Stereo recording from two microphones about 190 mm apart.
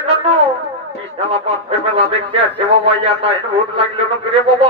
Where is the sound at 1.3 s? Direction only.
30° right (ahead or behind).